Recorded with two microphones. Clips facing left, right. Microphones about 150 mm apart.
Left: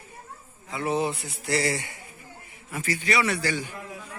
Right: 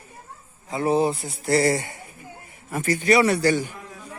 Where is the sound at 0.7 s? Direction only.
40° right (ahead or behind).